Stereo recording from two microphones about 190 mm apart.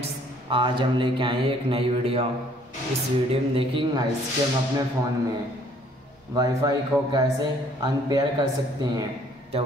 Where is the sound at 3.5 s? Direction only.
25° right (ahead or behind).